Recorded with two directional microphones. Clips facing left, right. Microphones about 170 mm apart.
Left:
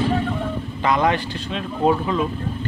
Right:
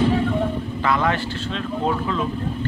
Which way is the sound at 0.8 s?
20° left (ahead or behind).